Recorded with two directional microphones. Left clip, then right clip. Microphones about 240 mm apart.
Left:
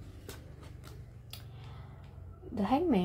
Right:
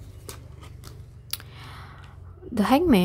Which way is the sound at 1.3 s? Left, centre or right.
Right.